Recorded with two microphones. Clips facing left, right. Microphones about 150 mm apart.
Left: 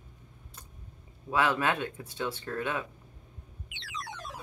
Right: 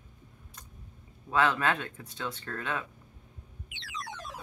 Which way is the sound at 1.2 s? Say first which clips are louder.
Even; 15° left (ahead or behind).